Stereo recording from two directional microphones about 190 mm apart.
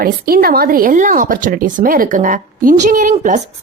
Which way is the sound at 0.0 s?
50° right (ahead or behind).